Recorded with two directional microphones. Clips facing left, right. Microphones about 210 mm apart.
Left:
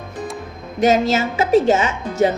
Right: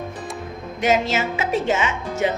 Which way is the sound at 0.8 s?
40° left (ahead or behind).